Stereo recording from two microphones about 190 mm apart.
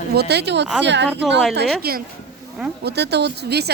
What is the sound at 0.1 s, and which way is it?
Speech, 60° right (ahead or behind).